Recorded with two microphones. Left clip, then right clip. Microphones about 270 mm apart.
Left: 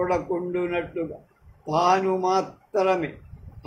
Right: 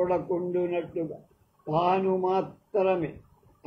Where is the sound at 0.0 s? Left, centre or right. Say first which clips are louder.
Left 2 dB; left.